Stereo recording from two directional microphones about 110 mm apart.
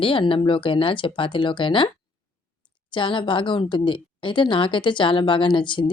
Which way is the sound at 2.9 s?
50° left (ahead or behind).